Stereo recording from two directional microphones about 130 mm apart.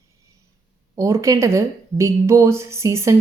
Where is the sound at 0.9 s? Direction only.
25° right (ahead or behind).